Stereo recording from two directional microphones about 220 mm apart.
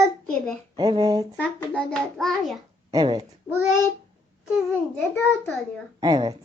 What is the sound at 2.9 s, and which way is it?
Speech, 15° right (ahead or behind).